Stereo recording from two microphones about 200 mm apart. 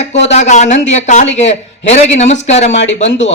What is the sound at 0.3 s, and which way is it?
A man's voice, 35° left (ahead or behind).